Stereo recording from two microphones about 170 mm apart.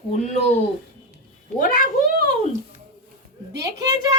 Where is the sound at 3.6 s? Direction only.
20° right (ahead or behind).